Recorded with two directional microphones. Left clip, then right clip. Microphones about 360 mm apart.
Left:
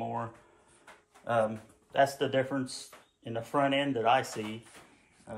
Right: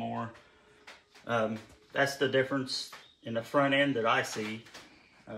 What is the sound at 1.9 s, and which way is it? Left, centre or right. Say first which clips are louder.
Speech: left 1 dB; left.